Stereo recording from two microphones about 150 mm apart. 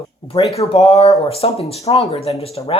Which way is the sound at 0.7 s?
45° left (ahead or behind).